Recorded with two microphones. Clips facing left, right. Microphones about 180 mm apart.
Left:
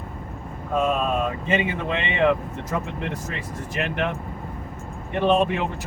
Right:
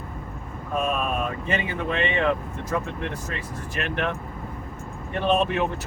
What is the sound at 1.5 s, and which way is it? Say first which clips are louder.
Speech: left 3 dB; 20° left (ahead or behind).